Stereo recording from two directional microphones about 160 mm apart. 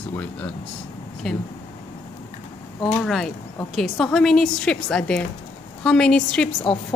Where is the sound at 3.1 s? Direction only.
5° left (ahead or behind).